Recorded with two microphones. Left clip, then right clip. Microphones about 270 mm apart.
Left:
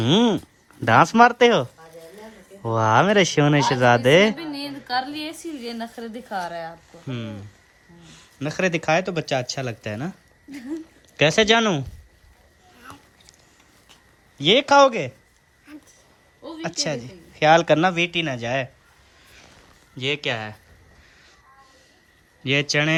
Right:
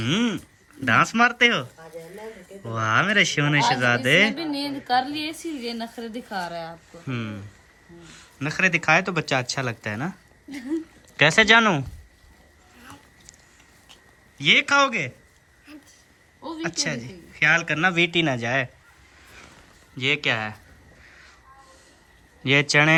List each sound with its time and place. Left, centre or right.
0.1 s speech: left
2.7 s speech: left
4.5 s a woman's voice: centre
4.9 s a woman's voice: centre
12.8 s dog: centre
14.3 s a woman's voice: centre
16.6 s speech: centre
17.7 s speech: centre
20.0 s a woman's voice: centre
21.0 s crow: centre
22.7 s a woman's voice: centre